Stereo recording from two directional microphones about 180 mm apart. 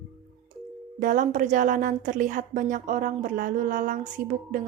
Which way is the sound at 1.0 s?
45° right (ahead or behind).